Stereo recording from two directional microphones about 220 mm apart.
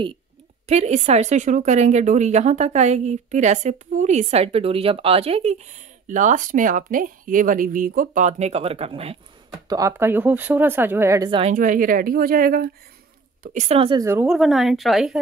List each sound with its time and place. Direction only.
0.7 s a woman's voice: 30° right (ahead or behind)
9.7 s speech: 15° right (ahead or behind)
11.5 s a woman's voice: 40° right (ahead or behind); by 15.1 s centre (ahead or behind)